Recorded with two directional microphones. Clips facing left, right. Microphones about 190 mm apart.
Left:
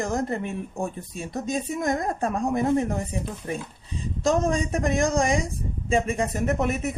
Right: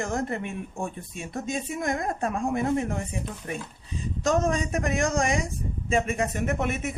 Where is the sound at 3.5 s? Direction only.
30° left (ahead or behind).